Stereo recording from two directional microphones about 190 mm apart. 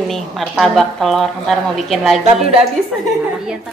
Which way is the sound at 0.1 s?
Centre (ahead or behind).